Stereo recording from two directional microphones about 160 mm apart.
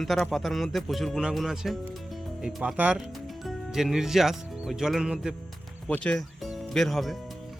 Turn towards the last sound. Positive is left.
turn(degrees=0)  # may be behind; listen again after turning